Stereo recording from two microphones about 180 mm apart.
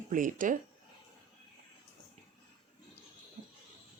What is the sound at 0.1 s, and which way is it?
Speech, 45° right (ahead or behind).